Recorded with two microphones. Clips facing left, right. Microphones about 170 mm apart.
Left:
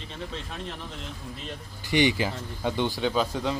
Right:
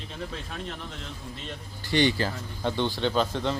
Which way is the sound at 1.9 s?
15° left (ahead or behind).